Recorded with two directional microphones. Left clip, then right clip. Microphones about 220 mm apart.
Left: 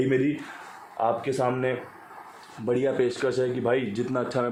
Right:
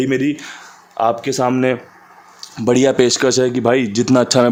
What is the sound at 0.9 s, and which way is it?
Speech, 55° right (ahead or behind).